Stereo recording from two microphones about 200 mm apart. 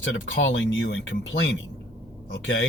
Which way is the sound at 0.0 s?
65° left (ahead or behind).